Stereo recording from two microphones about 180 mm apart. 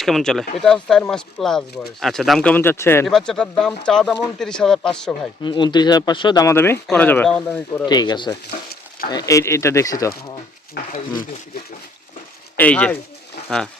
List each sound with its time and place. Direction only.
0.0 s speech: centre (ahead or behind)
3.1 s speech: 5° left (ahead or behind)
5.4 s speech: 25° left (ahead or behind); by 7.9 s 10° left (ahead or behind)
7.9 s speech: 25° left (ahead or behind)
8.4 s stir: 60° left (ahead or behind)
9.0 s speech: 20° left (ahead or behind)
10.9 s speech: 50° left (ahead or behind)
12.5 s speech: 5° left (ahead or behind)